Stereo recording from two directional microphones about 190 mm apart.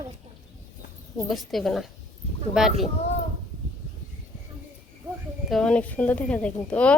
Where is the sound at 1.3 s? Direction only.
Centre (ahead or behind).